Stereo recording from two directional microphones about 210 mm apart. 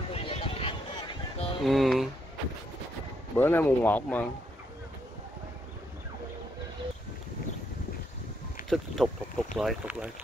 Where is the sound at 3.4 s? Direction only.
10° left (ahead or behind).